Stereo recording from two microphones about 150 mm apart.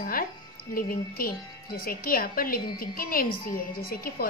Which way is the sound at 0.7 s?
70° left (ahead or behind).